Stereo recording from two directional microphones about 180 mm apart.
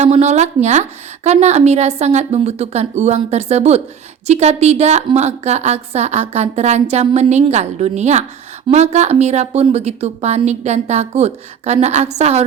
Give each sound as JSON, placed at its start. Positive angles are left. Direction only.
{"t": 0.0, "sound": "a woman's voice", "side_deg": -40}